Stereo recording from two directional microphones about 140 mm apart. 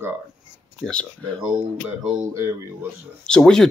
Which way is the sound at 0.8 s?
5° left (ahead or behind).